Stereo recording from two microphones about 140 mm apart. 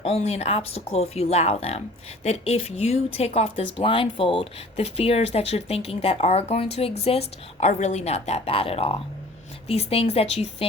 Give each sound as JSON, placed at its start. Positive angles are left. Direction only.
{"t": 0.0, "sound": "speech", "side_deg": 45}